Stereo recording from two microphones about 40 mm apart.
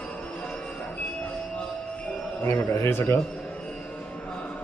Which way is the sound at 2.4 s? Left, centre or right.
Left.